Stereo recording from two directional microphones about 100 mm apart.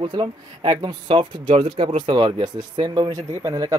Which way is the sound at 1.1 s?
60° right (ahead or behind).